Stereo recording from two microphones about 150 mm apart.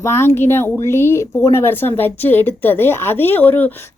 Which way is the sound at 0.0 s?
15° left (ahead or behind).